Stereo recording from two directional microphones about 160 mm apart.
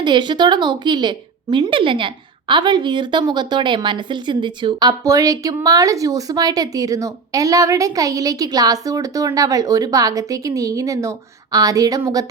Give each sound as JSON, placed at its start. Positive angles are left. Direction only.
{"t": 0.0, "sound": "a woman's voice", "side_deg": -30}